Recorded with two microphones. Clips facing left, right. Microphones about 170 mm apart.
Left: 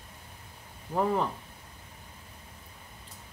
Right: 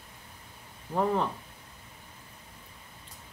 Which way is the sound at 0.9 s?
5° left (ahead or behind).